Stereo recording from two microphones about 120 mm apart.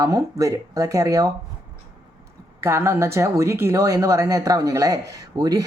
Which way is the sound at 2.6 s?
20° right (ahead or behind).